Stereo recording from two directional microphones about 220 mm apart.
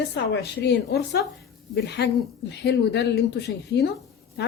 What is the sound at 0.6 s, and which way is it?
Speech, 50° left (ahead or behind).